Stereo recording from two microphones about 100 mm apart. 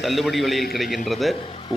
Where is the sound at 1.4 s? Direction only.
60° left (ahead or behind).